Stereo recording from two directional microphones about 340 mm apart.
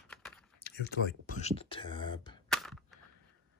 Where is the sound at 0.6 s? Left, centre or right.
Left.